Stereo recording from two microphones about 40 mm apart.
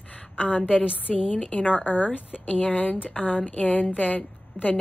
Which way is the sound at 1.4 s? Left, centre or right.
Left.